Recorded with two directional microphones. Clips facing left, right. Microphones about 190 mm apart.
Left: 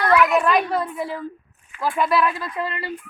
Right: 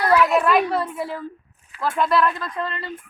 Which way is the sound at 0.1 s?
30° right (ahead or behind).